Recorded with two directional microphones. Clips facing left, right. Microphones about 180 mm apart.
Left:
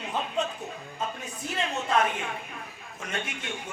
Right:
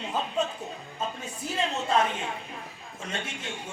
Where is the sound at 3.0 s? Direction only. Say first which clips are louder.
Left 1 dB; 30° right (ahead or behind).